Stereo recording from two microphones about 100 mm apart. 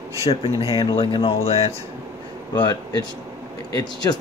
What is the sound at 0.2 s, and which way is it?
Speech, 65° left (ahead or behind).